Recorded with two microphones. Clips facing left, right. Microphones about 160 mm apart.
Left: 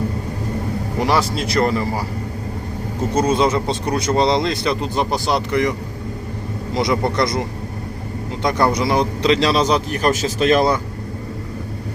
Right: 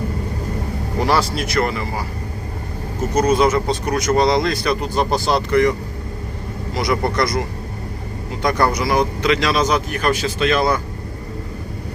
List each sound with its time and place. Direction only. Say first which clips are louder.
0.9 s a man's voice: even; 15° left (ahead or behind)
1.5 s speech: left 2 dB; 35° left (ahead or behind)
3.2 s speech: right 2 dB; 25° left (ahead or behind)
6.7 s speech: left 1 dB; 20° left (ahead or behind); by 10.7 s 40° left (ahead or behind)